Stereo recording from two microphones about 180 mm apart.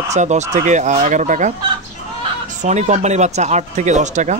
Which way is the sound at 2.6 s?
40° right (ahead or behind).